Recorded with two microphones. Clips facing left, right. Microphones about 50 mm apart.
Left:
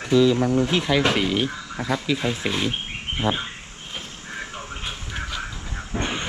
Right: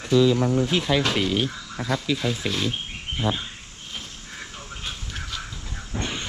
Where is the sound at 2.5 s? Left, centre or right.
Left.